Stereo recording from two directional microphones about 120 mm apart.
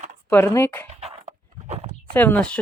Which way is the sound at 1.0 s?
65° right (ahead or behind).